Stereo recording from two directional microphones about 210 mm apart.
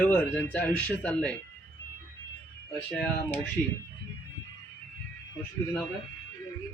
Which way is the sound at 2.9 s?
5° left (ahead or behind).